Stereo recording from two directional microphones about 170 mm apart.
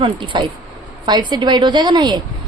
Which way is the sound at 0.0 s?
25° right (ahead or behind).